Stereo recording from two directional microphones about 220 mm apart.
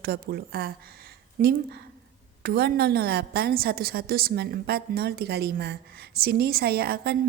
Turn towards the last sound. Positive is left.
turn(degrees=-45)  # may be behind; listen again after turning